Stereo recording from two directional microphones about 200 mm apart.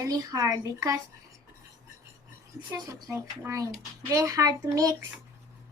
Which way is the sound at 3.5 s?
15° right (ahead or behind).